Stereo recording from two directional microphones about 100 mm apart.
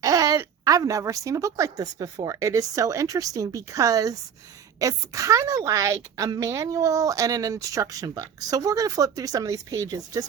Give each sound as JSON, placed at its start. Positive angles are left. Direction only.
{"t": 0.0, "sound": "speech", "side_deg": -35}